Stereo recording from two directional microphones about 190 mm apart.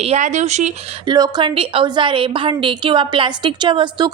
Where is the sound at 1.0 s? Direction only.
20° right (ahead or behind).